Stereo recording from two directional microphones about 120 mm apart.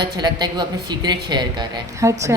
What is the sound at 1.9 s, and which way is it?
Speech, 25° right (ahead or behind).